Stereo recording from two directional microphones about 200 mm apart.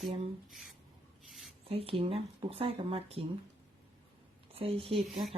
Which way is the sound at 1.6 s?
30° right (ahead or behind).